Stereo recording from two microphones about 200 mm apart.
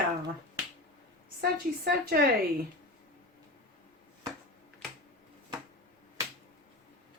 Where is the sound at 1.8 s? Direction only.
50° right (ahead or behind).